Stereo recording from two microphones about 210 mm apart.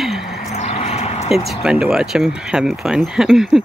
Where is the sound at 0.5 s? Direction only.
30° left (ahead or behind).